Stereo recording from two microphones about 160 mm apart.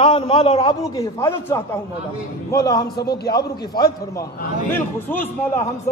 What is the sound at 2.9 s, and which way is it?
Speech, 80° left.